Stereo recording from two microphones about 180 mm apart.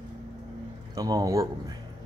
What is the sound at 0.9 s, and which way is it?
Speech, 20° right (ahead or behind).